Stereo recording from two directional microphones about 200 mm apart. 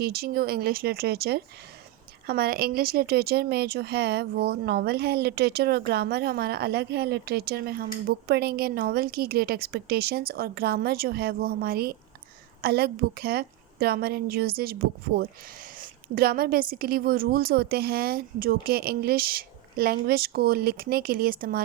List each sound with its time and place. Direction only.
0.0 s speech: 50° right (ahead or behind)